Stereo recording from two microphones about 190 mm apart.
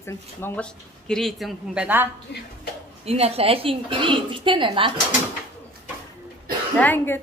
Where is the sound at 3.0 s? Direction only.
30° right (ahead or behind).